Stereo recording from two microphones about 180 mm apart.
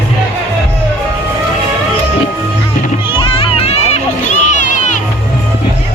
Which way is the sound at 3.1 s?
30° left (ahead or behind).